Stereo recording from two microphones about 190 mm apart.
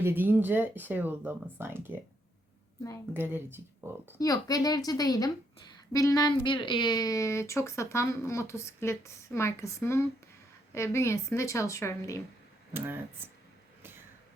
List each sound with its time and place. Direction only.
0.0 s speech: 10° right (ahead or behind)
3.1 s speech: 10° right (ahead or behind)
4.2 s a woman's voice: 20° left (ahead or behind)
12.7 s speech: 10° right (ahead or behind)